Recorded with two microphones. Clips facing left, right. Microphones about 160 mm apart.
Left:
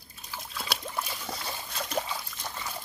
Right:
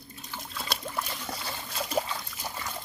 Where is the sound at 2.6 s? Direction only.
5° left (ahead or behind).